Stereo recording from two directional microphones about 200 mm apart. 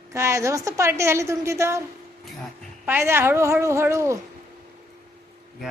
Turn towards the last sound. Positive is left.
turn(degrees=-15)  # may be behind; listen again after turning